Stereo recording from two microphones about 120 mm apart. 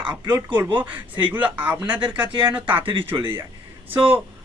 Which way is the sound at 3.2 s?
20° right (ahead or behind).